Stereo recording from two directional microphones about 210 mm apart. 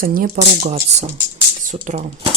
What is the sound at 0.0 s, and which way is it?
Speech, 40° right (ahead or behind).